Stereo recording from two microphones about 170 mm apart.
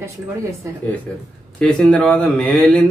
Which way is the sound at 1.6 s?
5° left (ahead or behind).